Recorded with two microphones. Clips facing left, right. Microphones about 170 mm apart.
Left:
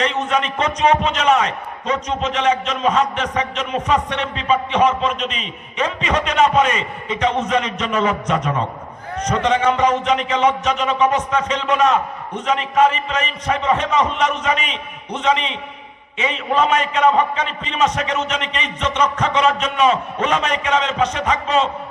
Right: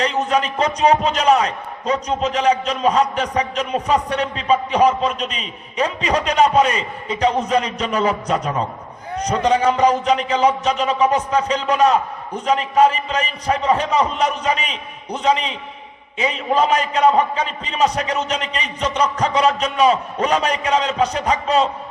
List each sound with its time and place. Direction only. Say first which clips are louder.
0.0 s a man's voice: right 1 dB; 35° right (ahead or behind)